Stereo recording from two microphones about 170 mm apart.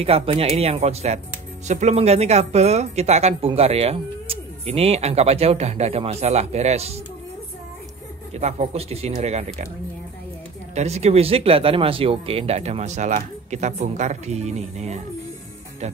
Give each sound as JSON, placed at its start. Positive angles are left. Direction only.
{"t": 0.0, "sound": "speech", "side_deg": -35}
{"t": 8.3, "sound": "speech", "side_deg": -40}
{"t": 10.7, "sound": "speech", "side_deg": -40}